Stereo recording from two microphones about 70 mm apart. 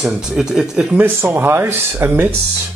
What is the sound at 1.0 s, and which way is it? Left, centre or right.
Speech, right.